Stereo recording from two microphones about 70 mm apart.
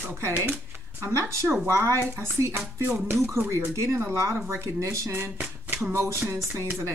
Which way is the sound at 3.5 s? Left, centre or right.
Right.